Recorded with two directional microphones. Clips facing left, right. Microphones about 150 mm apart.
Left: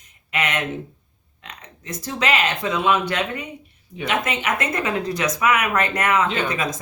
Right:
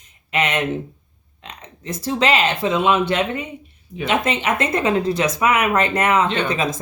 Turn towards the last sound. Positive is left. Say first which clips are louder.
# right 3 dB
turn(degrees=-30)  # may be behind; listen again after turning